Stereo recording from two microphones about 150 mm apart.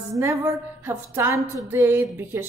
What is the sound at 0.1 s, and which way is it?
A woman's voice, 20° right (ahead or behind).